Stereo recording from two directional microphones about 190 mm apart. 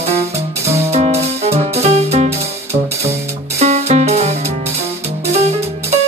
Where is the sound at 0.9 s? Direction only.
35° right (ahead or behind).